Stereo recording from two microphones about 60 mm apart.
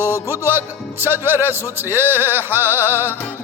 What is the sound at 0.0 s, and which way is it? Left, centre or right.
Music, right.